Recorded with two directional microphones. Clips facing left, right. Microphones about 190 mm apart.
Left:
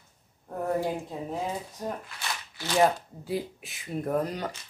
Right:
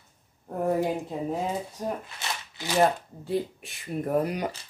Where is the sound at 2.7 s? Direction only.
Centre (ahead or behind).